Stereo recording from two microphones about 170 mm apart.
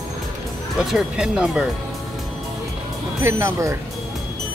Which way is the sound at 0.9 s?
5° right (ahead or behind).